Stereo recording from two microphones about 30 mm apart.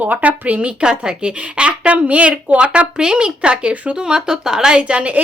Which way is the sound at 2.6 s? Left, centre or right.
Right.